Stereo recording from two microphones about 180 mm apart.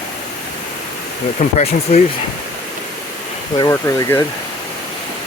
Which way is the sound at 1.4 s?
40° left (ahead or behind).